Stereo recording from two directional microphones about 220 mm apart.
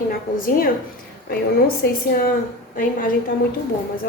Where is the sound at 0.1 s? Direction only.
40° left (ahead or behind).